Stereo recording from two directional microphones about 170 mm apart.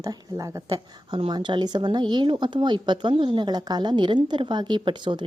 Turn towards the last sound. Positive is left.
turn(degrees=-25)  # may be behind; listen again after turning